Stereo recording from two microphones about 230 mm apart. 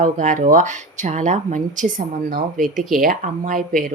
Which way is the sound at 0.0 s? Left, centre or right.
Right.